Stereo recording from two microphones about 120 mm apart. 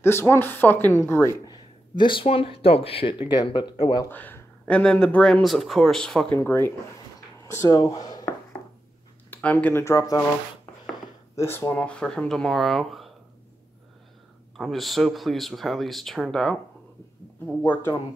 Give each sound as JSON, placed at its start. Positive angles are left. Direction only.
{"t": 0.0, "sound": "speech", "side_deg": 20}
{"t": 1.5, "sound": "a sound", "side_deg": 40}
{"t": 2.2, "sound": "speech", "side_deg": 55}
{"t": 4.1, "sound": "speech", "side_deg": 15}
{"t": 6.3, "sound": "speech", "side_deg": 20}
{"t": 8.3, "sound": "a sound", "side_deg": 15}
{"t": 9.3, "sound": "speech", "side_deg": 15}
{"t": 11.3, "sound": "speech", "side_deg": 20}
{"t": 14.6, "sound": "speech", "side_deg": 0}